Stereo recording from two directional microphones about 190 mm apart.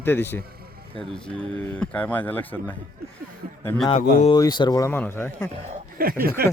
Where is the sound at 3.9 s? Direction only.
30° left (ahead or behind); by 5.5 s 10° left (ahead or behind).